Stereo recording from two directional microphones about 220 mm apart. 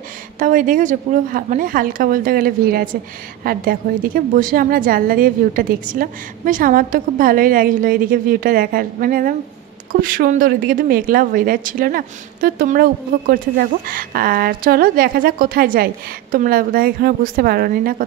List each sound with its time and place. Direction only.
0.4 s speech: 35° right (ahead or behind)